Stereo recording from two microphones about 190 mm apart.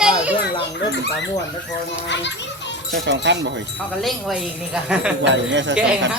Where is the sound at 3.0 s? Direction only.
65° right (ahead or behind).